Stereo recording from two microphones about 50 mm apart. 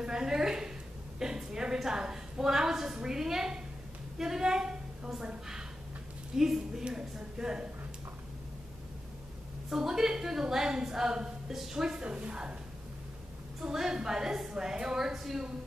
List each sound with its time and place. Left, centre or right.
0.0 s a woman's voice: centre
6.3 s a woman's voice: centre
9.7 s a woman's voice: centre
13.6 s a woman's voice: centre